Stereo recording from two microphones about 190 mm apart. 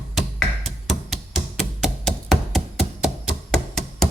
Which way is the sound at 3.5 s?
Centre (ahead or behind).